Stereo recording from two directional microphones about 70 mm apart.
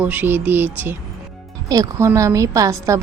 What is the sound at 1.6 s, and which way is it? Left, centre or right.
A woman's voice, right.